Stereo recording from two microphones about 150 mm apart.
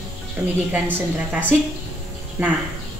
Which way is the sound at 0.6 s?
10° right (ahead or behind).